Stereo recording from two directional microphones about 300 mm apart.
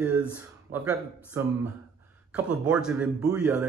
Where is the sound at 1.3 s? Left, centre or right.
Centre.